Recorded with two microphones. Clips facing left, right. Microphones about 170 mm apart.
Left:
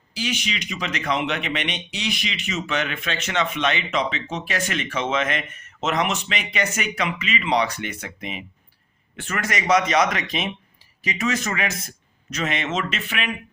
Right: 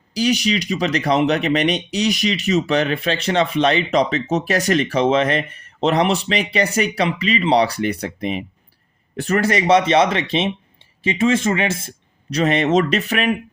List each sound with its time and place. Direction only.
0.1 s speech: 40° right (ahead or behind)